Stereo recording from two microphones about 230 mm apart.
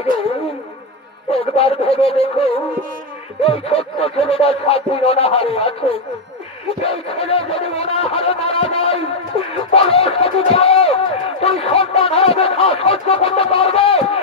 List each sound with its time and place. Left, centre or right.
1.3 s speech: left